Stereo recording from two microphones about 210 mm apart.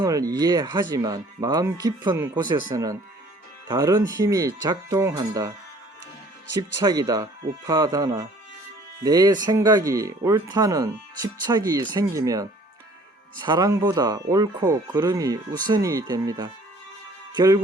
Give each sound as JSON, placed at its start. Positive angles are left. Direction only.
{"t": 0.0, "sound": "speech", "side_deg": -15}
{"t": 6.8, "sound": "speech", "side_deg": -20}
{"t": 17.3, "sound": "music", "side_deg": -15}